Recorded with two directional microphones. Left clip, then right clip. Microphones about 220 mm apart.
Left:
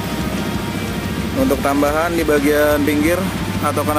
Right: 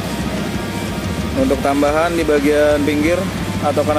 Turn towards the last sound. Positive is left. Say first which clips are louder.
# right 1 dB
turn(degrees=0)  # may be behind; listen again after turning